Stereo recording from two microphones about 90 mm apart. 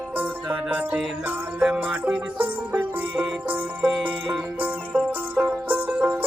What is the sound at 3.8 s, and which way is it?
Music, 15° right (ahead or behind).